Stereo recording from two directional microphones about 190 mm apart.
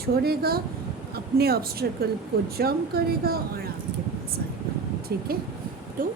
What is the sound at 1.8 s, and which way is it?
A woman's voice, 50° right (ahead or behind).